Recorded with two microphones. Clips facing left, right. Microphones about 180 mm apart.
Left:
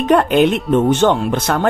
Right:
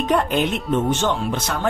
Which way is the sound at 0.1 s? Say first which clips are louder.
Left 8 dB; 70° left (ahead or behind).